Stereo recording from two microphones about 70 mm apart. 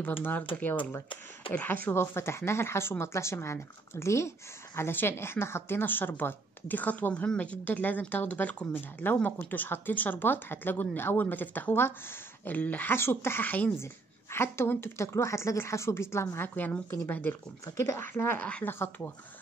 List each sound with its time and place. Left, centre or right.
0.0 s speech: left
14.3 s speech: left
17.7 s speech: left
18.0 s speech: left
18.4 s speech: left